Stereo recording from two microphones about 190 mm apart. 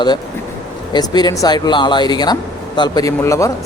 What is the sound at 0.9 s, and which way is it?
Speech, 20° left (ahead or behind).